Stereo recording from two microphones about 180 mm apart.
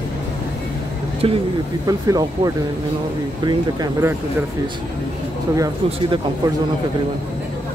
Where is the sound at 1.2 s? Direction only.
30° right (ahead or behind).